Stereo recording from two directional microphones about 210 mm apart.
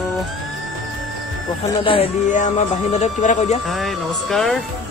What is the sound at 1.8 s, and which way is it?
Speech, 25° left (ahead or behind).